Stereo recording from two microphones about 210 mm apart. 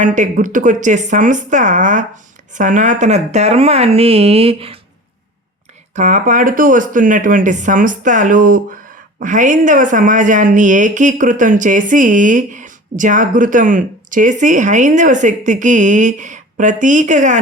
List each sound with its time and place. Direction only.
0.0 s speech: 35° right (ahead or behind)
5.9 s speech: 35° right (ahead or behind)